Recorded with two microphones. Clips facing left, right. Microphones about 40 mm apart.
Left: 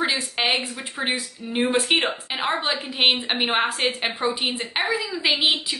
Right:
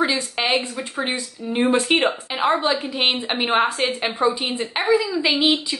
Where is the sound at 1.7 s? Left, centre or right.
Centre.